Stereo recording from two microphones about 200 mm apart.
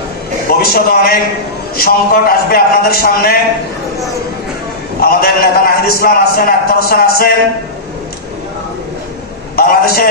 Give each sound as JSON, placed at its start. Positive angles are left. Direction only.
{"t": 0.5, "sound": "a man's voice", "side_deg": 50}
{"t": 5.0, "sound": "a man's voice", "side_deg": 50}
{"t": 9.6, "sound": "a sound", "side_deg": 50}